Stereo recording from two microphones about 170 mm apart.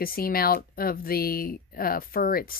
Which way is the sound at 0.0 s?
60° left (ahead or behind).